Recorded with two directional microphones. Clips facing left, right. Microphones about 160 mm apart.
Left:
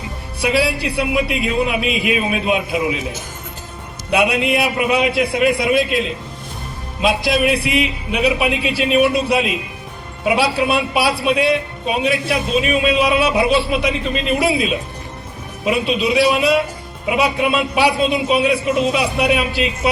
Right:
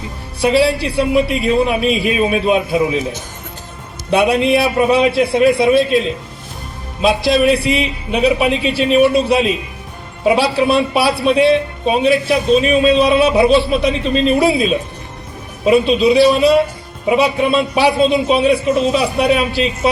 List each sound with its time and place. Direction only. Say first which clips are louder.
0.3 s speech: right 5 dB; 30° right (ahead or behind)
4.1 s speech: right 4 dB; 30° right (ahead or behind)
7.4 s speech: right 3 dB; 30° right (ahead or behind)
15.6 s speech: right 7 dB; 30° right (ahead or behind)